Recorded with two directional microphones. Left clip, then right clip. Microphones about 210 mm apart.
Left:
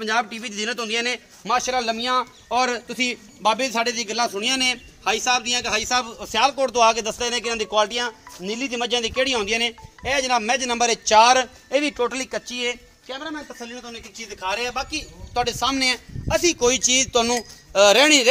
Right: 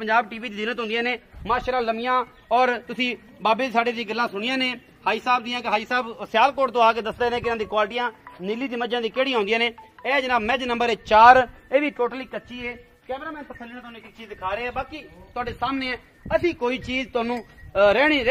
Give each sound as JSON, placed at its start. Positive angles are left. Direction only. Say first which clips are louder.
{"t": 0.0, "sound": "a man's voice", "louder": "right 1 dB", "side_deg": -30}
{"t": 2.5, "sound": "a man's voice", "louder": "right 2 dB", "side_deg": -40}
{"t": 11.7, "sound": "speech", "louder": "even", "side_deg": -5}
{"t": 12.1, "sound": "speech", "louder": "left 5 dB", "side_deg": 15}
{"t": 14.3, "sound": "a man's voice", "louder": "left 2 dB", "side_deg": 50}